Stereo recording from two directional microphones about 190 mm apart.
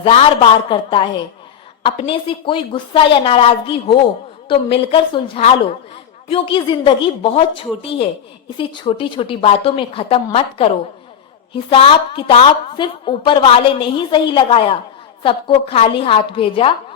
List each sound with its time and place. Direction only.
0.0 s a woman's voice: 30° left (ahead or behind)